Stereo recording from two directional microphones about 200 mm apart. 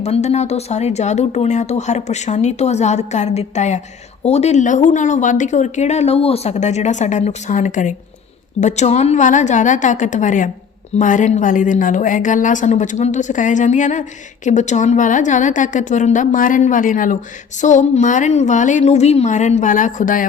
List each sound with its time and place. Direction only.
0.0 s speech: 35° left (ahead or behind)